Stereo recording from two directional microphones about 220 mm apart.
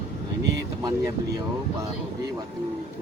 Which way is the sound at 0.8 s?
15° right (ahead or behind).